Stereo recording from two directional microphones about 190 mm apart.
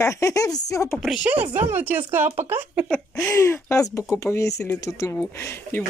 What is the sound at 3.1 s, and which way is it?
Speech, 15° left (ahead or behind).